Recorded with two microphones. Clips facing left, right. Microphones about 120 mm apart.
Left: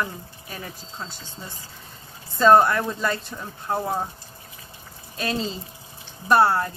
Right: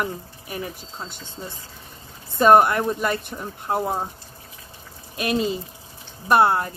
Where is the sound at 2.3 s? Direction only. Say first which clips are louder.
Right 1 dB; 15° right (ahead or behind).